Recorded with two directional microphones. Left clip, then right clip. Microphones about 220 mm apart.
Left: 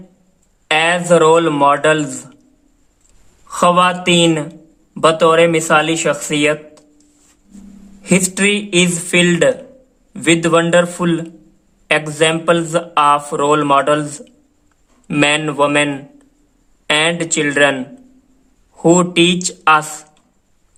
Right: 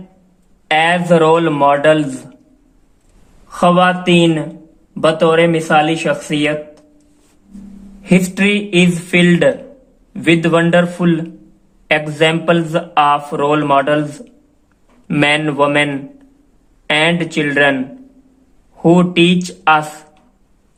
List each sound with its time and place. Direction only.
0.7 s speech: 20° left (ahead or behind)
3.5 s speech: 30° left (ahead or behind)
8.0 s speech: 20° left (ahead or behind)
18.8 s speech: 20° left (ahead or behind)